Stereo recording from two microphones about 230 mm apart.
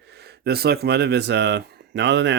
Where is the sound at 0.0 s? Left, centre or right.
Right.